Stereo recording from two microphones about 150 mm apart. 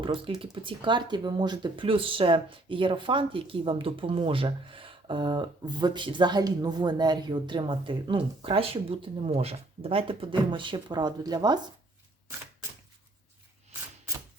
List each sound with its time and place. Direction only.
0.0 s speech: 35° right (ahead or behind)